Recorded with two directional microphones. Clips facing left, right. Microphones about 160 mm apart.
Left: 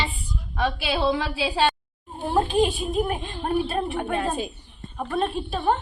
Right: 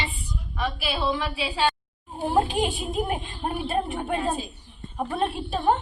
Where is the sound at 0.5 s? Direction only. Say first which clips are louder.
Left 4 dB; 85° left.